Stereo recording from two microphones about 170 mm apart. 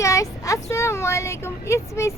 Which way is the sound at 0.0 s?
20° left (ahead or behind).